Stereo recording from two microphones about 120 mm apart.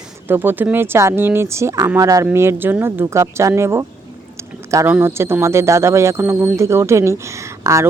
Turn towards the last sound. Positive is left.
turn(degrees=-25)  # may be behind; listen again after turning